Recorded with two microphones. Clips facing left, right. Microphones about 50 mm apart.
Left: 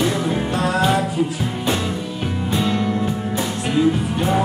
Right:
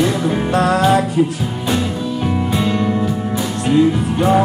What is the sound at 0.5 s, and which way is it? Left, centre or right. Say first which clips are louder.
Music: right 6 dB; right.